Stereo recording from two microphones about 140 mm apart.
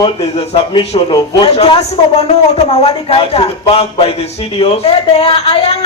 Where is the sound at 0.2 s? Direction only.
45° left (ahead or behind).